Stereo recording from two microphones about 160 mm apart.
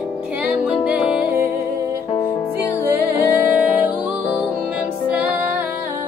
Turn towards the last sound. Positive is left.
turn(degrees=-10)  # may be behind; listen again after turning